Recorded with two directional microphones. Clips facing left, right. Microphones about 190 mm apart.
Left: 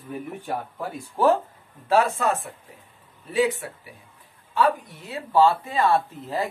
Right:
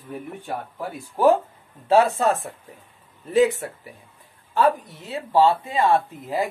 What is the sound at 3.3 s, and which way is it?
Speech, 45° right (ahead or behind).